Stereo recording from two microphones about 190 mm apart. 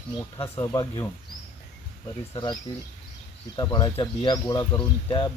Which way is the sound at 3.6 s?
20° left (ahead or behind).